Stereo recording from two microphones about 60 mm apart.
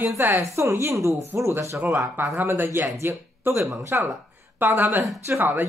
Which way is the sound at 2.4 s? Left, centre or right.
Right.